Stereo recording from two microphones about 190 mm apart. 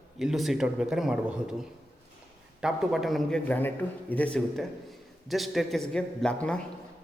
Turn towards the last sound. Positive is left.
turn(degrees=5)  # may be behind; listen again after turning